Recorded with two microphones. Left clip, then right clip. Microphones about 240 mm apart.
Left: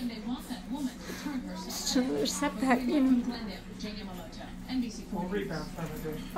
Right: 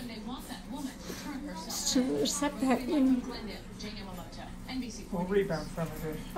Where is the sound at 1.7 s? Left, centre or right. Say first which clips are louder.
Even; centre.